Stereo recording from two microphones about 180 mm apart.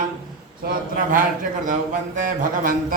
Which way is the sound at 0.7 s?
50° right (ahead or behind).